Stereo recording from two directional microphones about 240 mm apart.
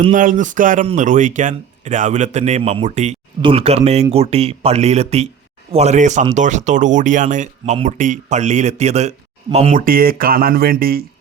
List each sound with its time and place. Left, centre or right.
0.1 s speech: right